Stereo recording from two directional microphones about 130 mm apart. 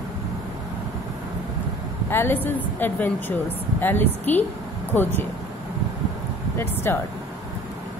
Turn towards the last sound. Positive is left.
turn(degrees=20)  # may be behind; listen again after turning